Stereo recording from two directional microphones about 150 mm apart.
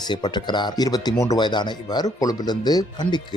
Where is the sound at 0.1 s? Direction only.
30° left (ahead or behind).